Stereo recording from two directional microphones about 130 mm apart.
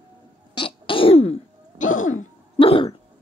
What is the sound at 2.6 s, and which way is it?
Cough, 45° left (ahead or behind).